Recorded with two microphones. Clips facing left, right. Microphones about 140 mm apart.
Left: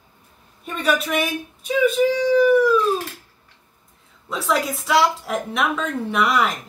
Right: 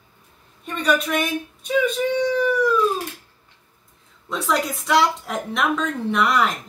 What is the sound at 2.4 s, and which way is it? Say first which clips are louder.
Howl: left 7 dB; 5° left (ahead or behind).